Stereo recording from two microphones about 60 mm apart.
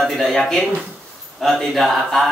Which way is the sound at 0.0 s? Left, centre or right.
Centre.